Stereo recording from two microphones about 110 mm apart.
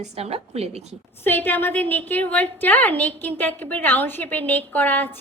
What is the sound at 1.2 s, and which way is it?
A woman's voice, 20° left (ahead or behind).